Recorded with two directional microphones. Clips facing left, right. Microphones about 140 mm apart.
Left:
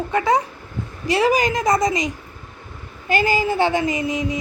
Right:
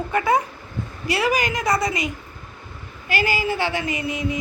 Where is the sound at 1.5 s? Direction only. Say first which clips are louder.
Left 3 dB; 20° left (ahead or behind).